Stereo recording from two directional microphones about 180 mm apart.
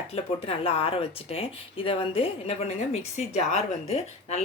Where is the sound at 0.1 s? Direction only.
35° left (ahead or behind).